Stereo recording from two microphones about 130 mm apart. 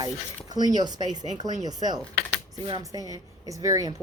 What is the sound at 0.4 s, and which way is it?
A woman's voice, 30° right (ahead or behind).